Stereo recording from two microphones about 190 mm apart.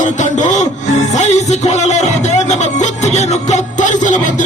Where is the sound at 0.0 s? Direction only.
40° left (ahead or behind).